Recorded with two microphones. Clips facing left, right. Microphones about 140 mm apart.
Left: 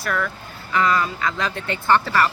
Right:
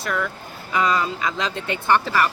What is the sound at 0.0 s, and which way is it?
Speech, 20° right (ahead or behind).